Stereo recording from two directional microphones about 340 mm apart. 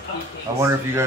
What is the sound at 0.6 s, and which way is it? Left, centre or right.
Speech, centre.